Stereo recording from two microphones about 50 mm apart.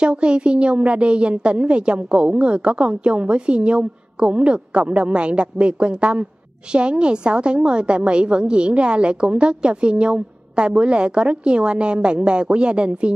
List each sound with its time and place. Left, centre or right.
0.0 s a woman's voice: right